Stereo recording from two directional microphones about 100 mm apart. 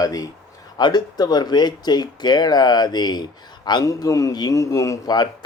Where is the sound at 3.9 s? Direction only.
35° left (ahead or behind).